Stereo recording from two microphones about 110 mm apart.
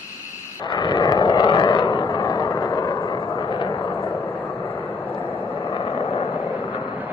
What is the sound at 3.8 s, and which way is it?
Vehicle, 25° left (ahead or behind).